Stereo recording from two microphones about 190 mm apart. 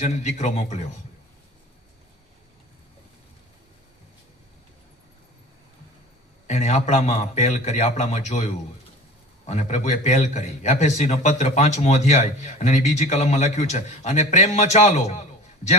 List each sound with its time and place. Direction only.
0.0 s a man's voice: 40° left (ahead or behind)
6.5 s a man's voice: 40° left (ahead or behind)